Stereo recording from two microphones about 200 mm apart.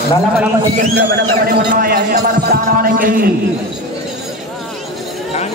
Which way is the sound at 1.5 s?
45° right (ahead or behind).